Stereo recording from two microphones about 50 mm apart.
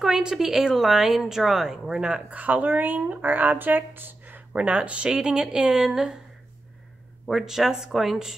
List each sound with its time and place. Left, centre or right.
0.0 s a woman's voice: centre
2.3 s speech: right
4.5 s a woman's voice: right; by 6.1 s centre
7.2 s a woman's voice: centre